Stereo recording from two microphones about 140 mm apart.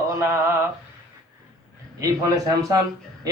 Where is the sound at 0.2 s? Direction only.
20° right (ahead or behind).